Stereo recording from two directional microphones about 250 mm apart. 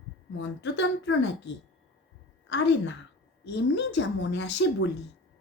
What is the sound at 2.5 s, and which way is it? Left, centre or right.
A woman's voice, left.